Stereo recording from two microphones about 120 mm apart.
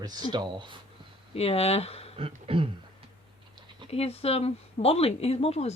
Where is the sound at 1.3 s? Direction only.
60° left (ahead or behind).